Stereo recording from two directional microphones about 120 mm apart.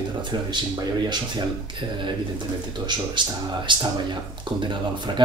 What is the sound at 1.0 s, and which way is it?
Speech, 40° right (ahead or behind).